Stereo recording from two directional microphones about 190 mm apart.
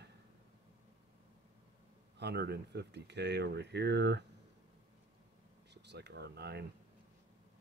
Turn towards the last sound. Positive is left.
turn(degrees=-60)  # may be behind; listen again after turning